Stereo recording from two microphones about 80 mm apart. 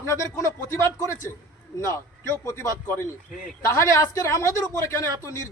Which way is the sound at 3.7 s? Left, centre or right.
Left.